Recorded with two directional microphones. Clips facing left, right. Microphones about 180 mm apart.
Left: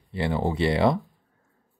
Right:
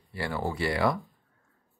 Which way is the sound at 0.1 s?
20° left (ahead or behind).